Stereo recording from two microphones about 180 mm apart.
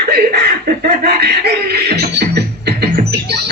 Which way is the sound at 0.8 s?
65° right (ahead or behind).